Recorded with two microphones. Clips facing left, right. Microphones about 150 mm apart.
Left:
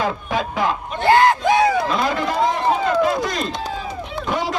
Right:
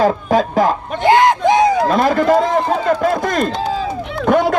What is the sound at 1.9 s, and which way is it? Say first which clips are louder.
A man's voice: right 8 dB; 50° right (ahead or behind).